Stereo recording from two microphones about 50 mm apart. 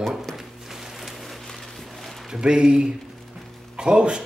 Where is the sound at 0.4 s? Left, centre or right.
Centre.